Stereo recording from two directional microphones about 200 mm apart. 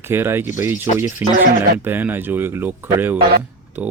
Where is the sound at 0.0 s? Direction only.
10° right (ahead or behind).